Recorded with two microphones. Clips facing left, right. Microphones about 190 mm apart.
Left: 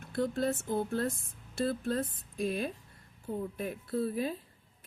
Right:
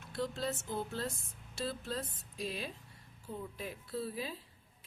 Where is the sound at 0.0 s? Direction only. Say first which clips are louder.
Left 6 dB; 50° left (ahead or behind).